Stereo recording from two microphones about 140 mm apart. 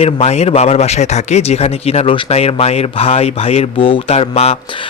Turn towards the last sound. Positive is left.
turn(degrees=45)  # may be behind; listen again after turning